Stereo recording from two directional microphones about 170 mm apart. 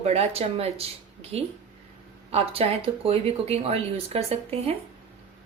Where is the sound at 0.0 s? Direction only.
40° right (ahead or behind).